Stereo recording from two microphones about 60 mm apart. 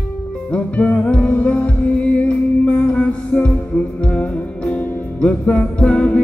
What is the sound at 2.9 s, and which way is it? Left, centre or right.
Music, left.